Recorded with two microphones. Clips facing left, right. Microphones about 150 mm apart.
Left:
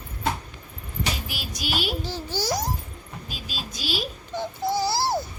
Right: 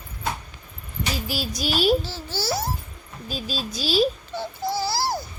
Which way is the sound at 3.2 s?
35° right (ahead or behind).